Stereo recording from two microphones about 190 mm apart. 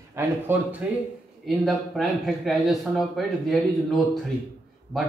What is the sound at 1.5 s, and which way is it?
Speech, centre (ahead or behind).